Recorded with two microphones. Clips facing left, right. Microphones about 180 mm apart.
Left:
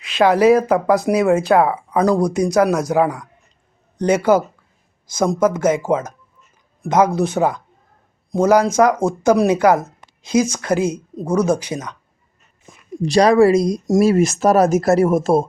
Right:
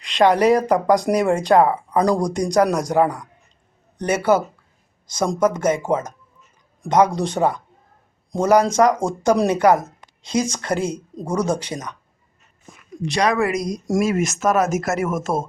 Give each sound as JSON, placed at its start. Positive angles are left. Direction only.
{"t": 0.0, "sound": "speech", "side_deg": 5}
{"t": 13.0, "sound": "speech", "side_deg": 35}